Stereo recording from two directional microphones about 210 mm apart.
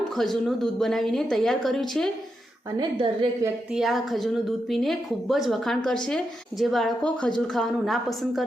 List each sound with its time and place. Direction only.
0.2 s a woman's voice: centre (ahead or behind)
2.7 s a woman's voice: 25° right (ahead or behind)
3.4 s a woman's voice: centre (ahead or behind)